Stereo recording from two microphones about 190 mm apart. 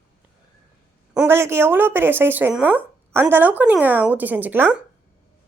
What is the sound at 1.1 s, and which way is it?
A woman's voice, 10° right (ahead or behind).